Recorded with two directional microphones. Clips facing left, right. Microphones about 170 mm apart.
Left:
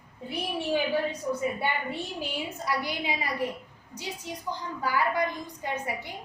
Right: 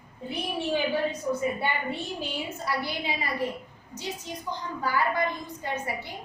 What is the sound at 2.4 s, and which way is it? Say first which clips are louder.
A woman's voice: even; 15° left (ahead or behind).